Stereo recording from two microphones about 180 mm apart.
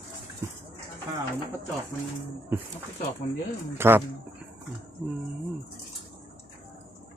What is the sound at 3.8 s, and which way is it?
Speech, 10° right (ahead or behind).